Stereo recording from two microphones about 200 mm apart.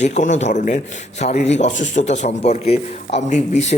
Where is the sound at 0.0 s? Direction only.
35° left (ahead or behind).